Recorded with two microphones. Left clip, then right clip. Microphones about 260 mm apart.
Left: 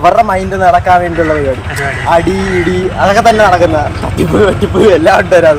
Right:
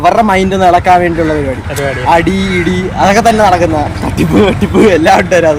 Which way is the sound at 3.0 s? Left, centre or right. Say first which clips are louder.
Even; right.